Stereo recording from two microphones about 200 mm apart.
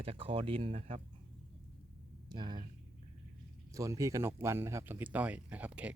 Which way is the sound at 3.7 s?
15° right (ahead or behind).